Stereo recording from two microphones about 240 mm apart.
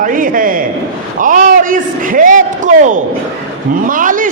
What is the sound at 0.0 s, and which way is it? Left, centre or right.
Speech, right.